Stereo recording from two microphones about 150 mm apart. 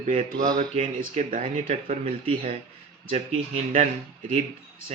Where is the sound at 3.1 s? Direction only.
45° right (ahead or behind).